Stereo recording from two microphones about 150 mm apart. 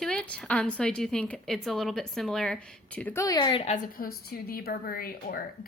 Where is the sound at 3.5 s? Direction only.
45° left (ahead or behind).